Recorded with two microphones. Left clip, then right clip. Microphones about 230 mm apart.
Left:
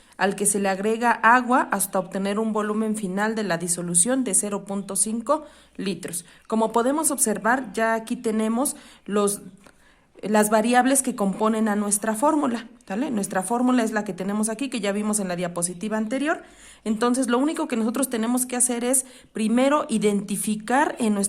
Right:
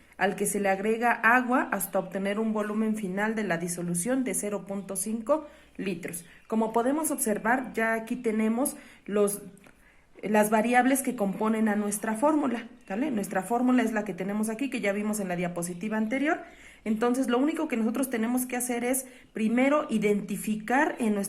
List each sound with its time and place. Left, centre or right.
0.2 s a woman's voice: left
10.2 s a woman's voice: left